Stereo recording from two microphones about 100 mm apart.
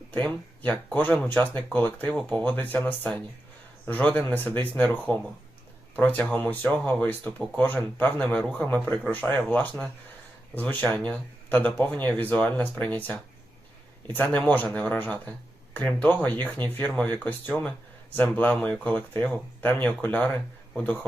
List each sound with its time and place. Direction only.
0.2 s speech: 10° left (ahead or behind)